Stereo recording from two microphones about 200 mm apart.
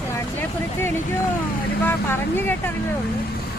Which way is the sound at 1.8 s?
10° left (ahead or behind).